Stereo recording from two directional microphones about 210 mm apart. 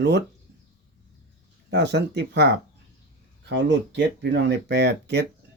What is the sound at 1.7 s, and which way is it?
Speech, 55° right (ahead or behind).